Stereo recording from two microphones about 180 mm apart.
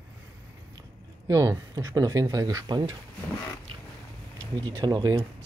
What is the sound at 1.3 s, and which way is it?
Speech, 20° right (ahead or behind).